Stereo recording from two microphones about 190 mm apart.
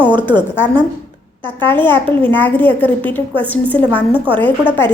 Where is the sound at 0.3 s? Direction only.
10° left (ahead or behind).